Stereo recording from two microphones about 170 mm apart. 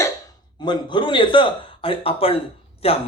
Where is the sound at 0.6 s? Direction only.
30° left (ahead or behind).